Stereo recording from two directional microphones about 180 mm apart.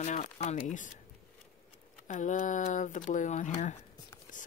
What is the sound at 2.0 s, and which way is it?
Speech, 45° left (ahead or behind).